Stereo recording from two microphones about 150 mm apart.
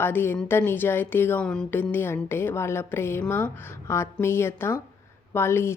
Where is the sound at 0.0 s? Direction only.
15° left (ahead or behind).